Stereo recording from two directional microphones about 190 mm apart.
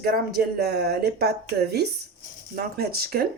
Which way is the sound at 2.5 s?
55° right (ahead or behind).